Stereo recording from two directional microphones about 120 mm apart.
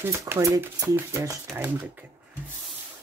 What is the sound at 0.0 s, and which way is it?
Speech, 20° right (ahead or behind).